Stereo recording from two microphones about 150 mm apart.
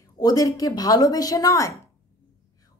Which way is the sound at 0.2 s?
25° left (ahead or behind).